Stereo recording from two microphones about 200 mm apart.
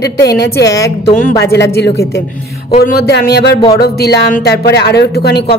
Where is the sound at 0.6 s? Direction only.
15° left (ahead or behind).